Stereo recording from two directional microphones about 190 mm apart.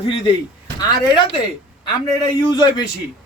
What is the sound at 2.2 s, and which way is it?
Speech, 20° left (ahead or behind).